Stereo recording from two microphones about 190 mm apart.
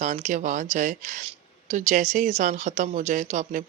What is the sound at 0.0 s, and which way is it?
Speech, 40° right (ahead or behind).